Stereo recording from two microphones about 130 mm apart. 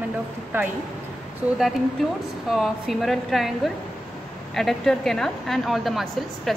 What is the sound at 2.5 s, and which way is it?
A woman's voice, centre (ahead or behind).